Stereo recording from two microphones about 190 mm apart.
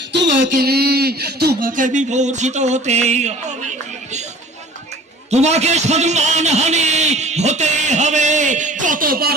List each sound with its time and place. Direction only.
0.1 s a sound: 65° right (ahead or behind)
0.5 s a man's voice: 55° right (ahead or behind); by 3.5 s 35° right (ahead or behind)
5.3 s a man's voice: 35° right (ahead or behind)